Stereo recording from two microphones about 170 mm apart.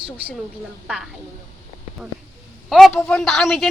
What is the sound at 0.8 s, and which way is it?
Speech, centre (ahead or behind).